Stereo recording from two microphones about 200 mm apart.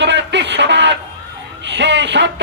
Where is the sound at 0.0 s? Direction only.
60° right (ahead or behind).